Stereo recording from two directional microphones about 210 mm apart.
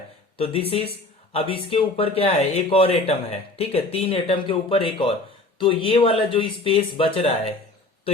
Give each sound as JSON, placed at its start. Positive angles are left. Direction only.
{"t": 0.3, "sound": "speech", "side_deg": 25}